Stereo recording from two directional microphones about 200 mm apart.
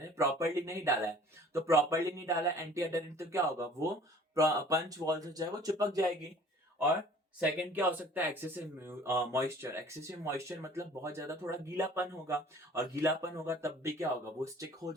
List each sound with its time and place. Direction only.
0.2 s speech: 15° right (ahead or behind)
7.3 s speech: 10° right (ahead or behind)